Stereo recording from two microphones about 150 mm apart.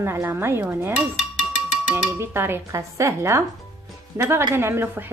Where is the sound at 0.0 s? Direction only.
15° right (ahead or behind).